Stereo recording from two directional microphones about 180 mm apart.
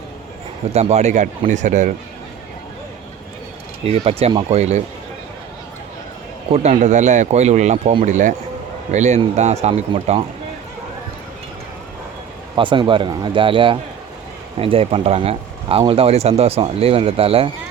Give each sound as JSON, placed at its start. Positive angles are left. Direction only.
{"t": 0.7, "sound": "speech", "side_deg": -35}
{"t": 3.8, "sound": "speech", "side_deg": -35}
{"t": 6.5, "sound": "speech", "side_deg": -40}
{"t": 12.5, "sound": "speech", "side_deg": -25}